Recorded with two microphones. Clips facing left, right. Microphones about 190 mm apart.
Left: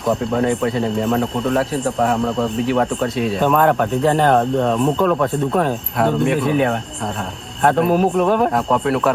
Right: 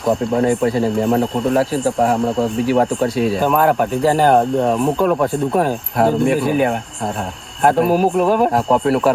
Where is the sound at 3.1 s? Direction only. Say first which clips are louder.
Left 1 dB; centre (ahead or behind).